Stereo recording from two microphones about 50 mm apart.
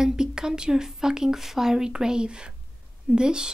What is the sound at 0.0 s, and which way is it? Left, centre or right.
Speech, centre.